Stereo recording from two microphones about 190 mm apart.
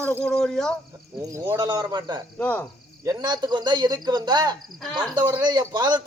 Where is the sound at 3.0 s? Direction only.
20° right (ahead or behind).